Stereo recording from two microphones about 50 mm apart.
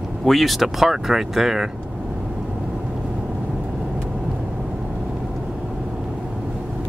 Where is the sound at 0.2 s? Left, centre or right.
Centre.